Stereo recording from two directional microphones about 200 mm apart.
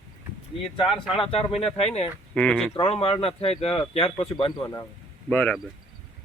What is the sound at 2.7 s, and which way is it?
Speech, 30° left (ahead or behind).